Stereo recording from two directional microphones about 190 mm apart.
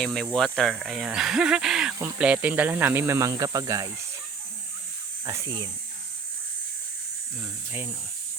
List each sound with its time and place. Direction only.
0.0 s speech: 5° left (ahead or behind); by 3.9 s 20° right (ahead or behind)
5.2 s speech: 15° right (ahead or behind)
7.4 s speech: 10° right (ahead or behind)